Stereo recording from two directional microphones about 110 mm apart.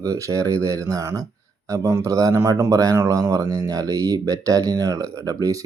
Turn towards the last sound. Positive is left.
turn(degrees=-35)  # may be behind; listen again after turning